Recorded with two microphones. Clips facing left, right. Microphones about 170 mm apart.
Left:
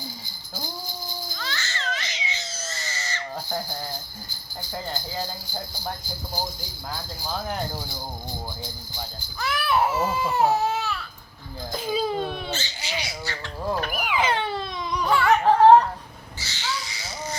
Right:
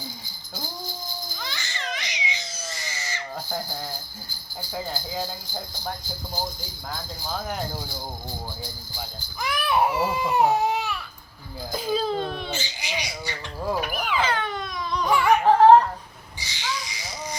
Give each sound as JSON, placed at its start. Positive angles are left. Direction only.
{"t": 1.4, "sound": "crying", "side_deg": -15}
{"t": 4.7, "sound": "speech", "side_deg": 0}
{"t": 6.9, "sound": "speech", "side_deg": 0}
{"t": 9.4, "sound": "speech", "side_deg": -15}
{"t": 11.7, "sound": "speech", "side_deg": 0}
{"t": 12.5, "sound": "speech", "side_deg": -10}
{"t": 13.9, "sound": "baby cry", "side_deg": 10}
{"t": 14.8, "sound": "babbling", "side_deg": 10}
{"t": 15.1, "sound": "a sound", "side_deg": -15}
{"t": 16.4, "sound": "a sound", "side_deg": -15}